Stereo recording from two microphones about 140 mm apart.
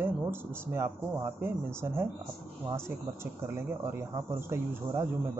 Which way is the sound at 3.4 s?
15° right (ahead or behind).